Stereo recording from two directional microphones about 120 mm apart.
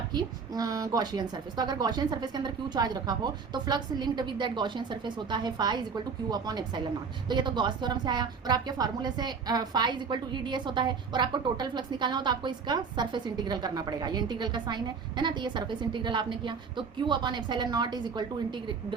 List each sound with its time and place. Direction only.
0.1 s a woman's voice: 35° right (ahead or behind)